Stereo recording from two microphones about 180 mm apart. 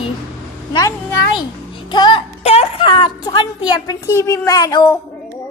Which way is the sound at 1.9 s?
25° left (ahead or behind).